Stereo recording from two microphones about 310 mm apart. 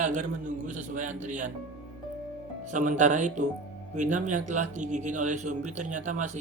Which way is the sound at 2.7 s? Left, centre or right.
Right.